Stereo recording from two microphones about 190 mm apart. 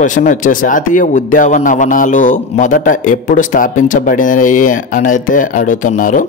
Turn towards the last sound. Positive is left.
turn(degrees=45)  # may be behind; listen again after turning